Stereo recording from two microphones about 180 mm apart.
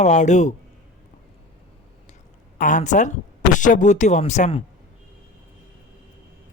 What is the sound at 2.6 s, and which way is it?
Speech, 45° left (ahead or behind).